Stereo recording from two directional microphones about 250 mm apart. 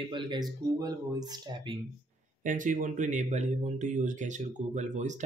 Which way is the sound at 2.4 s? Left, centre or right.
Right.